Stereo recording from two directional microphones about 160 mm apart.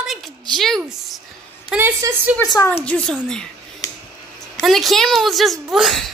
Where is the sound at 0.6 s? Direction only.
Centre (ahead or behind).